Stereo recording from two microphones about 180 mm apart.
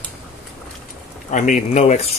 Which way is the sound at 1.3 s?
45° left (ahead or behind).